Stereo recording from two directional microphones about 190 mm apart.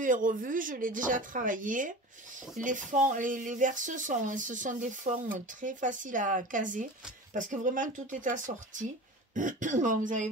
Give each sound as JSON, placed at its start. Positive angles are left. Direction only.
{"t": 0.0, "sound": "speech", "side_deg": -45}